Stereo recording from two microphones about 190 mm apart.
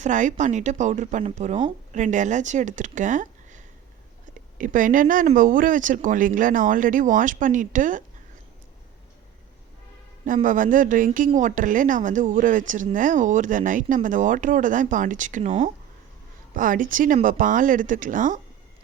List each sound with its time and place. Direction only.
0.0 s speech: 40° right (ahead or behind)
10.2 s speech: 45° right (ahead or behind)